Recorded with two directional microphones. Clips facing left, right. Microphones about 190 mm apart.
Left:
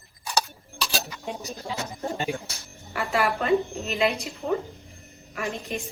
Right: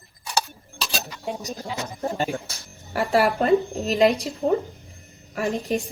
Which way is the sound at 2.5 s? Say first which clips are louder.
Right 5 dB; 35° right (ahead or behind).